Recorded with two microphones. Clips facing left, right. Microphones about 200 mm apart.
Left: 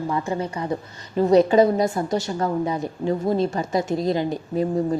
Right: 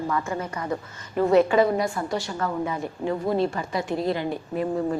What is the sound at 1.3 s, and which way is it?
Speech, 40° left (ahead or behind).